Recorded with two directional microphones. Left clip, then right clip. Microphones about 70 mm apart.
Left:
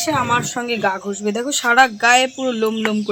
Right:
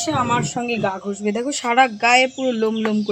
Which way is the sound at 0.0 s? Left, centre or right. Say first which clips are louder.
Left 2 dB; left.